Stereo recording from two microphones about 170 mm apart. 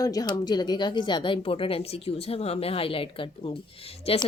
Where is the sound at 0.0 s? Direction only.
20° left (ahead or behind).